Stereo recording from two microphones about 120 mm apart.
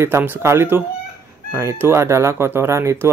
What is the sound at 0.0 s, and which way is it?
Speech, 20° right (ahead or behind).